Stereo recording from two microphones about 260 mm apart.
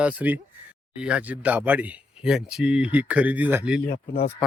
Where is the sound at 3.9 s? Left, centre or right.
Left.